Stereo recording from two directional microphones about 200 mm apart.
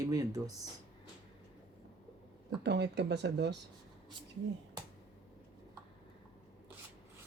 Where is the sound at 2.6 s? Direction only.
60° right (ahead or behind).